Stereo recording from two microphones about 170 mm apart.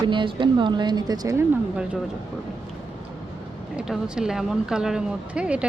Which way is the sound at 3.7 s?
5° right (ahead or behind).